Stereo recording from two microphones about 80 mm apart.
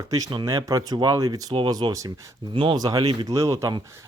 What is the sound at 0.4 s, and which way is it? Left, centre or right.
Speech, right.